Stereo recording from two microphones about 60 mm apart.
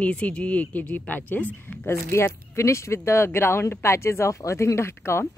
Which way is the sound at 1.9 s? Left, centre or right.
Left.